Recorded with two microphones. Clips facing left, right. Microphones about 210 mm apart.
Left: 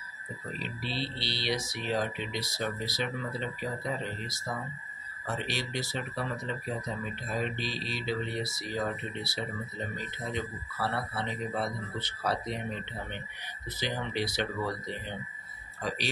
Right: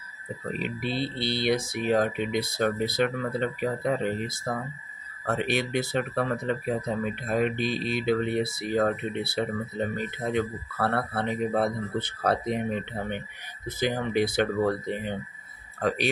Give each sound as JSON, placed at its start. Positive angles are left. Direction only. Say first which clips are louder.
{"t": 0.5, "sound": "speech", "louder": "right 7 dB", "side_deg": -55}